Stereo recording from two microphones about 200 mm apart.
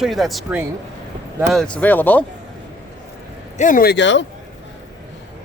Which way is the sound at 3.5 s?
40° left (ahead or behind).